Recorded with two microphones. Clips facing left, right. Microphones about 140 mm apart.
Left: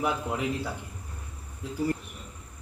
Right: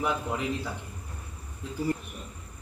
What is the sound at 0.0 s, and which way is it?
Speech, 5° left (ahead or behind).